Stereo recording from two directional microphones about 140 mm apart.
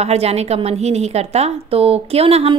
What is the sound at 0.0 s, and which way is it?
A woman's voice, 50° right (ahead or behind).